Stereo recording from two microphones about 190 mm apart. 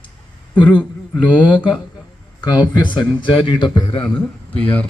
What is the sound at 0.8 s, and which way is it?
A man's voice, centre (ahead or behind).